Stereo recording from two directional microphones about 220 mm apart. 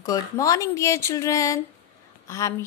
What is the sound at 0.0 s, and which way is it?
Speech, 15° left (ahead or behind).